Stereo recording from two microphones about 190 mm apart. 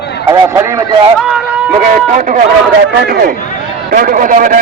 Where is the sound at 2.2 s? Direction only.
45° right (ahead or behind).